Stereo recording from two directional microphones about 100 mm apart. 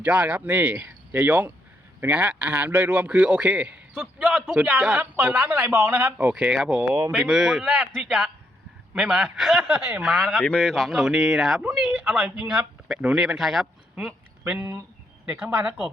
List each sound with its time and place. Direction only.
0.0 s a man's voice: 15° right (ahead or behind)
5.1 s a man's voice: 25° right (ahead or behind); by 10.2 s 5° right (ahead or behind)
10.2 s speech: 10° left (ahead or behind)
13.9 s a sound: 10° right (ahead or behind)
14.6 s speech: 30° right (ahead or behind)
15.3 s a man's voice: 15° right (ahead or behind)